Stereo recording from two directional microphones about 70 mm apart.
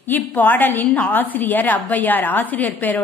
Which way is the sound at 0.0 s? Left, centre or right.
Left.